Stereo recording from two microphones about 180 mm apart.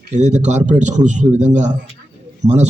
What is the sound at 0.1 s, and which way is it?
A man's voice, 40° right (ahead or behind).